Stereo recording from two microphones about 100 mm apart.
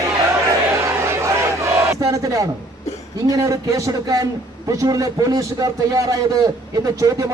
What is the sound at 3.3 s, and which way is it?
A man's voice, 35° right (ahead or behind).